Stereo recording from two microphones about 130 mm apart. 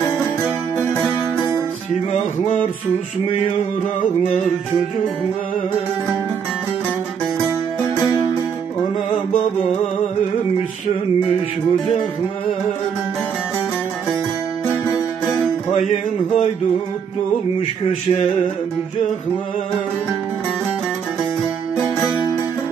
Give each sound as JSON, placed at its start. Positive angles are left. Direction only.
{"t": 0.7, "sound": "music", "side_deg": 15}
{"t": 15.7, "sound": "music", "side_deg": 70}